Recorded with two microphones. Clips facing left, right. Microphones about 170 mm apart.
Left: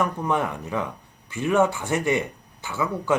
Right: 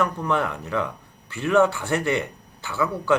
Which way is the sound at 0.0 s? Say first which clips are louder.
Even; 15° left (ahead or behind).